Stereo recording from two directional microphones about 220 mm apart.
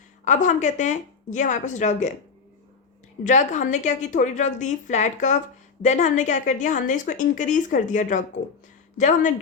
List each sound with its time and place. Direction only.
0.3 s a woman's voice: 35° left (ahead or behind)
3.2 s a woman's voice: 35° left (ahead or behind)